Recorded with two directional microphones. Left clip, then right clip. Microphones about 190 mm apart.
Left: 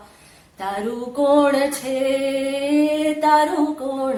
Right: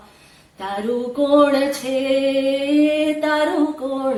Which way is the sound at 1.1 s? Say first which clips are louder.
Right 1 dB; 15° left (ahead or behind).